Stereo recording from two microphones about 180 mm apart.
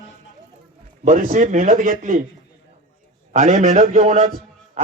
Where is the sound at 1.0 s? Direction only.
45° right (ahead or behind).